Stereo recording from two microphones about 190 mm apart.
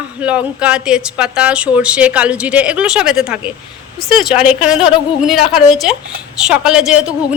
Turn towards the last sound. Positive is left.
turn(degrees=-5)  # may be behind; listen again after turning